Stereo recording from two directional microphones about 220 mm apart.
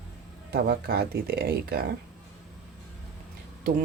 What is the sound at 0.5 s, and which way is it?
Speech, 45° right (ahead or behind).